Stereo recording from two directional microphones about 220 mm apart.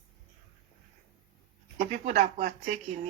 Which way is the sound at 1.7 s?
35° right (ahead or behind).